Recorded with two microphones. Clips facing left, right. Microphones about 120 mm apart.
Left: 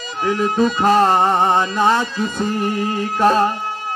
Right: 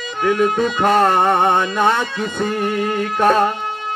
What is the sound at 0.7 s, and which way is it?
Music, 55° right (ahead or behind).